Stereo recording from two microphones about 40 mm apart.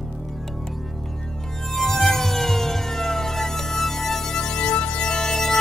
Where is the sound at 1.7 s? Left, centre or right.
Centre.